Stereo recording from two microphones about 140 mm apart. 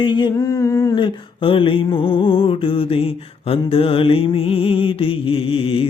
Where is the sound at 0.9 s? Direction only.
35° left (ahead or behind).